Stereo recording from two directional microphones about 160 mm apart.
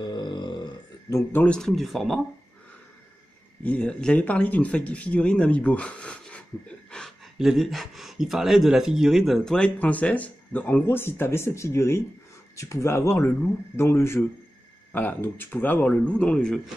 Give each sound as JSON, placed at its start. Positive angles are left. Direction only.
{"t": 0.0, "sound": "burping", "side_deg": 30}
{"t": 1.1, "sound": "speech", "side_deg": 10}
{"t": 3.6, "sound": "speech", "side_deg": 5}